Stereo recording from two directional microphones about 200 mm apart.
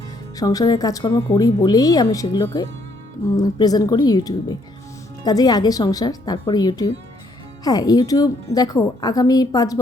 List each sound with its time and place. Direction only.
0.3 s a woman's voice: 20° left (ahead or behind)